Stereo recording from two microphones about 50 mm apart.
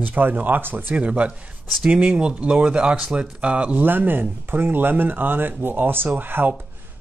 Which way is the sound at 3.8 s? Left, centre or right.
Right.